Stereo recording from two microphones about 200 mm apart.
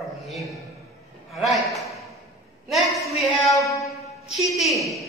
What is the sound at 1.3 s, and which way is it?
A woman's voice, centre (ahead or behind).